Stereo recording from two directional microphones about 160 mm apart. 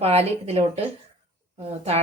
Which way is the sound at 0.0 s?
40° right (ahead or behind).